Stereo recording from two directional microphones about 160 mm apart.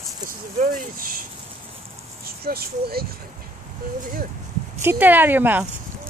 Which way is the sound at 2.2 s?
70° right (ahead or behind).